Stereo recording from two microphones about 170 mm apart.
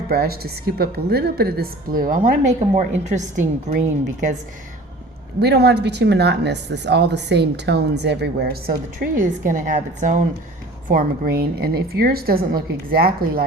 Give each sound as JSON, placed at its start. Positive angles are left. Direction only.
{"t": 0.1, "sound": "a woman's voice", "side_deg": -65}
{"t": 5.4, "sound": "speech", "side_deg": -75}
{"t": 10.8, "sound": "a woman's voice", "side_deg": -55}